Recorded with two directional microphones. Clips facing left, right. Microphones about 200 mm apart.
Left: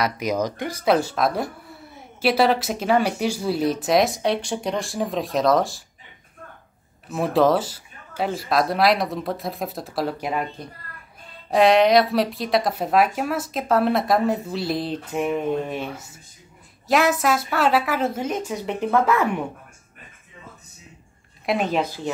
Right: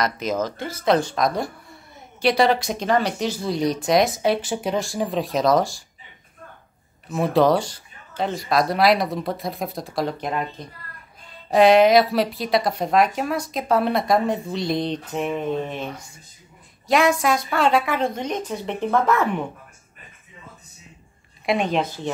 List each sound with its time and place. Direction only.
0.0 s speech: 10° left (ahead or behind)
7.1 s speech: centre (ahead or behind)
21.5 s speech: 5° left (ahead or behind)